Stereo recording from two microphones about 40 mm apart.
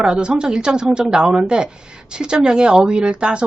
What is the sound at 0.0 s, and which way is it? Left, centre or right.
Speech, right.